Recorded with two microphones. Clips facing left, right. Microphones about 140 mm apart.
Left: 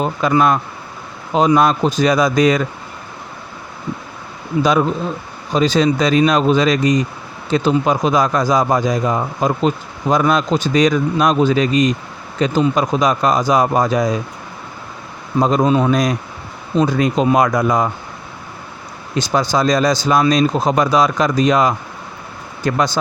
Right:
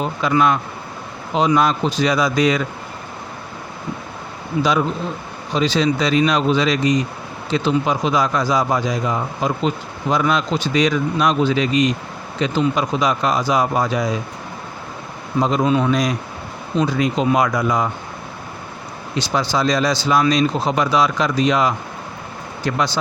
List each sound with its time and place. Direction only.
0.0 s a man's voice: 45° left (ahead or behind)
5.5 s a man's voice: 45° left (ahead or behind)
15.4 s a man's voice: 45° left (ahead or behind)
19.1 s a man's voice: 45° left (ahead or behind)